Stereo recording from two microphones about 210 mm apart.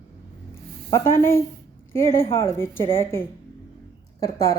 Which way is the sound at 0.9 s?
10° left (ahead or behind).